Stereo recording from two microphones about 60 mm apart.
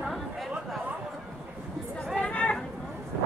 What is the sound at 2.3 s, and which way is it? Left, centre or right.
Chatter, left.